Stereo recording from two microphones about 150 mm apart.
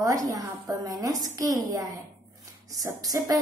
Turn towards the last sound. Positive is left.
turn(degrees=-25)  # may be behind; listen again after turning